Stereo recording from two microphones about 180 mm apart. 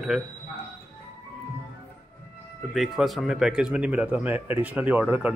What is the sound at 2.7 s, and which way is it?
Speech, centre (ahead or behind).